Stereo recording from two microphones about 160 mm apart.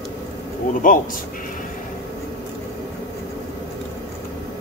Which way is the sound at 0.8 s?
60° left (ahead or behind).